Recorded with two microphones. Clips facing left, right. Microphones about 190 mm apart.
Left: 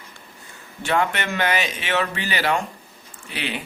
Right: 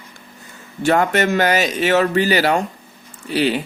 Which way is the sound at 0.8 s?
40° right (ahead or behind).